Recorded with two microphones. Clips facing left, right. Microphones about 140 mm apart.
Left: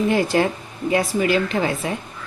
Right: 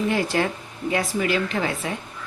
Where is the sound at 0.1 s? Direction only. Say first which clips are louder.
Left 4 dB; 25° left (ahead or behind).